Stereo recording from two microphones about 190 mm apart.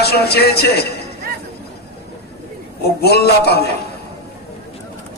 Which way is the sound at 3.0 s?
55° left (ahead or behind).